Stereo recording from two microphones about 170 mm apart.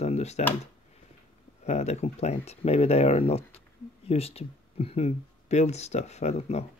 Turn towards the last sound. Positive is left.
turn(degrees=40)  # may be behind; listen again after turning